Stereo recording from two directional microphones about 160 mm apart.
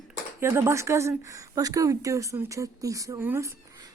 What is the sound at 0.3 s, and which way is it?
A woman's voice, 15° right (ahead or behind).